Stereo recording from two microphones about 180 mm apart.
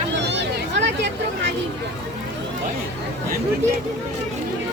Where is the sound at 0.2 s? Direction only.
75° right (ahead or behind).